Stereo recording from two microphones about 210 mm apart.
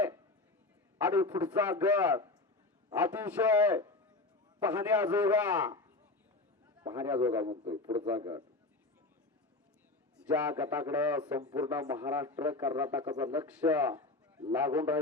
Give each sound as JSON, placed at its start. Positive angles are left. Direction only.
{"t": 0.9, "sound": "a man's voice", "side_deg": -10}
{"t": 6.8, "sound": "a man's voice", "side_deg": -10}
{"t": 10.2, "sound": "a man's voice", "side_deg": -5}